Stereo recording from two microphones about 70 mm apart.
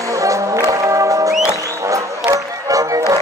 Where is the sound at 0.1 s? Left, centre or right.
Right.